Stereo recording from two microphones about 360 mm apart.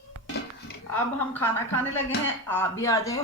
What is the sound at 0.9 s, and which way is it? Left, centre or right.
A woman's voice, centre.